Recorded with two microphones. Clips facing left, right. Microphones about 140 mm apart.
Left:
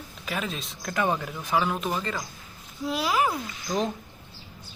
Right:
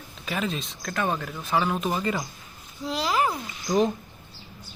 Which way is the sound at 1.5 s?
Centre (ahead or behind).